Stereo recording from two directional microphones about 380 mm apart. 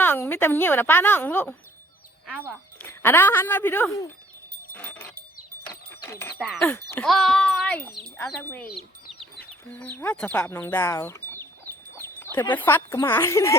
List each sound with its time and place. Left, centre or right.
0.0 s speech: centre
4.7 s a sound: centre
6.4 s speech: centre
8.6 s bird: centre
9.7 s speech: centre